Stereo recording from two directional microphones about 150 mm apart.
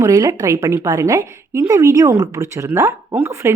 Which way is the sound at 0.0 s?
20° right (ahead or behind).